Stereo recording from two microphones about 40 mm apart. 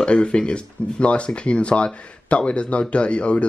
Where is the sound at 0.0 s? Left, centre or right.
Left.